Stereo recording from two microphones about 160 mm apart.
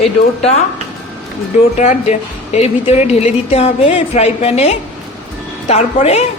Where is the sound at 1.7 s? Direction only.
45° left (ahead or behind).